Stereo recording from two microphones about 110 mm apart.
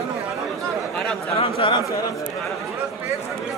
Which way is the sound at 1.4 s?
60° left (ahead or behind).